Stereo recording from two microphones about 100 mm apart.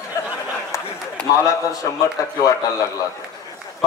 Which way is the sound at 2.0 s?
35° left (ahead or behind).